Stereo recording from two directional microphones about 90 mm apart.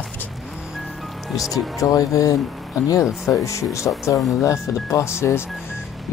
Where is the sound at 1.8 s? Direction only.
40° left (ahead or behind).